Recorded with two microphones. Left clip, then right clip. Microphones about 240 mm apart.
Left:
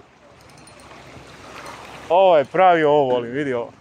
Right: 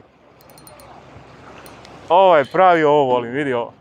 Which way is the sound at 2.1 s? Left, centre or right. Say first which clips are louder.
Right 2 dB; centre.